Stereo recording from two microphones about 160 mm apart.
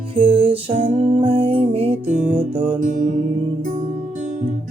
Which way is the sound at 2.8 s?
55° right (ahead or behind).